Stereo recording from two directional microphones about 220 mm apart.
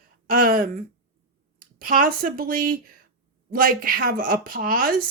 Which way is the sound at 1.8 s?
40° right (ahead or behind).